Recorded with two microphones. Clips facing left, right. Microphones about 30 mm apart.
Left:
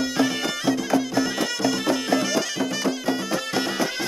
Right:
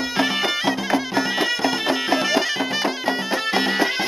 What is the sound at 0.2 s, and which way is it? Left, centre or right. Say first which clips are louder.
Music: right 4 dB; right.